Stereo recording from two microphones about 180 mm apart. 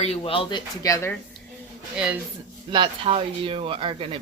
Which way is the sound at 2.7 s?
30° right (ahead or behind).